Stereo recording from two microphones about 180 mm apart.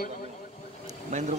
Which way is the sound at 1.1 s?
40° right (ahead or behind).